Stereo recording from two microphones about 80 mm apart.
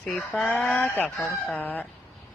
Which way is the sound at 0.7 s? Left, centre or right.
Left.